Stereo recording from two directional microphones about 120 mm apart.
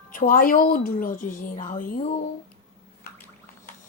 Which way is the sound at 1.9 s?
60° left (ahead or behind).